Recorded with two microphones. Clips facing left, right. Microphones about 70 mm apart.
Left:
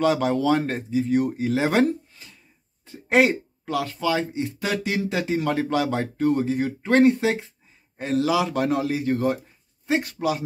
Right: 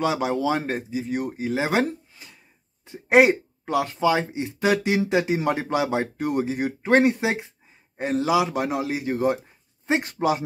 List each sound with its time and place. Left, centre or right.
0.0 s speech: centre; by 10.4 s right